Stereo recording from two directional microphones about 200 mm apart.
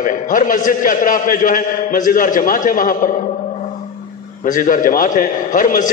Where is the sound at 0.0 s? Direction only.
40° left (ahead or behind).